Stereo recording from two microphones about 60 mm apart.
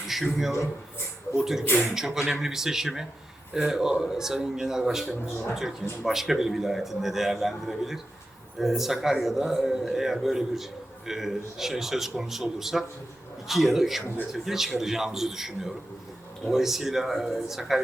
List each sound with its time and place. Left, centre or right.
0.1 s a man's voice: centre